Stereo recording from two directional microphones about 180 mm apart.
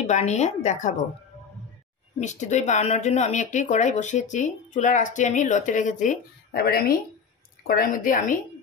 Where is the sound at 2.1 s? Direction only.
40° left (ahead or behind).